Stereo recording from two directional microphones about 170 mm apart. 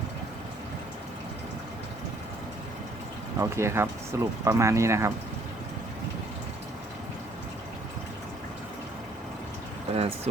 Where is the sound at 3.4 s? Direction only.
15° right (ahead or behind).